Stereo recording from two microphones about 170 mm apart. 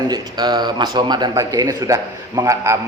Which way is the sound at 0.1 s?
25° right (ahead or behind).